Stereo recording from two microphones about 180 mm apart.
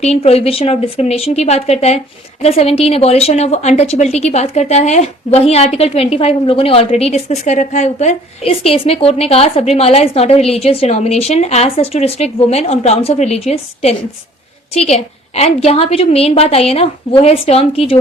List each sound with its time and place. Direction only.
0.0 s a woman's voice: 35° left (ahead or behind)